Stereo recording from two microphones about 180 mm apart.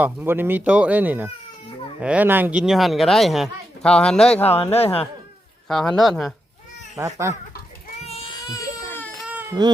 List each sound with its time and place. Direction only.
0.0 s speech: 10° right (ahead or behind)
4.7 s speech: 35° left (ahead or behind)
5.6 s speech: 5° left (ahead or behind)
6.9 s speech: 15° right (ahead or behind)
8.0 s baby cry: 35° left (ahead or behind)
8.4 s baby cry: 15° left (ahead or behind)
9.2 s baby cry: 10° right (ahead or behind)